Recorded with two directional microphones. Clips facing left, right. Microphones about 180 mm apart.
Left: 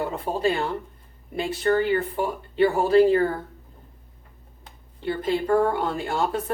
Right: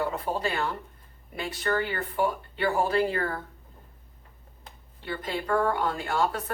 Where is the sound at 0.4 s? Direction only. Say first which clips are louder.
Left 6 dB; 30° left (ahead or behind).